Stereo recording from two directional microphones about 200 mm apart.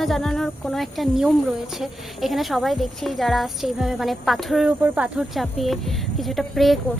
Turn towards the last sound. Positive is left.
turn(degrees=0)  # may be behind; listen again after turning